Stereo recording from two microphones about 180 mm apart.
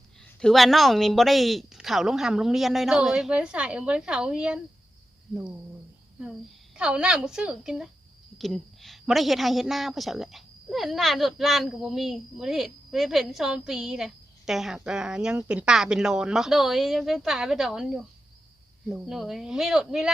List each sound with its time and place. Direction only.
0.3 s a woman's voice: centre (ahead or behind)
6.2 s a woman's voice: 5° right (ahead or behind)